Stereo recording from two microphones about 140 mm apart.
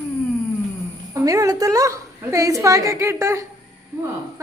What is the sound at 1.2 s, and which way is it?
A woman's voice, 25° right (ahead or behind).